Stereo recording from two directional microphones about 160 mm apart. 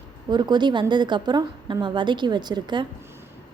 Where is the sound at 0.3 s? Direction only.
25° right (ahead or behind).